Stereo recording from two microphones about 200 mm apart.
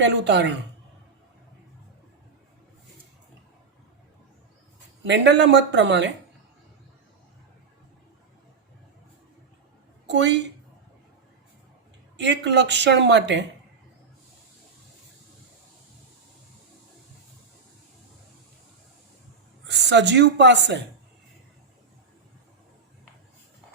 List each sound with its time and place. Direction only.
0.0 s a woman's voice: 60° right (ahead or behind)
5.0 s speech: 60° right (ahead or behind)
10.1 s speech: 60° right (ahead or behind)
12.1 s speech: 60° right (ahead or behind)
19.6 s a woman's voice: 60° right (ahead or behind)